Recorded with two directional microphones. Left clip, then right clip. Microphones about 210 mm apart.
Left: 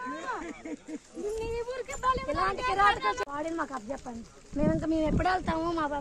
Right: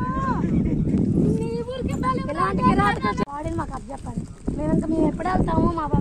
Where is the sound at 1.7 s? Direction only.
15° right (ahead or behind).